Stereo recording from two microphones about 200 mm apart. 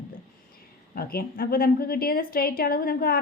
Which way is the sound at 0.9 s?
50° left (ahead or behind).